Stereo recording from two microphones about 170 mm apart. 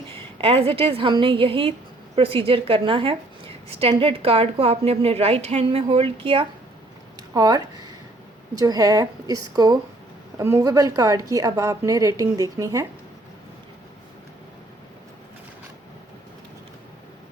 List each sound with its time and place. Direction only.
0.1 s a woman's voice: 35° right (ahead or behind)